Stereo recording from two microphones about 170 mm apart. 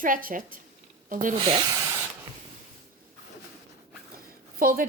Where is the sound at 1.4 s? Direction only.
30° right (ahead or behind).